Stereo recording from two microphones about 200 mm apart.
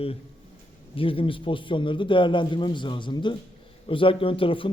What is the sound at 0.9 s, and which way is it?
A man's voice, 25° left (ahead or behind).